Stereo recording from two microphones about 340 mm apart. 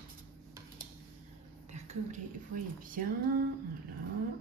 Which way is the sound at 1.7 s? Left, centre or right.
Centre.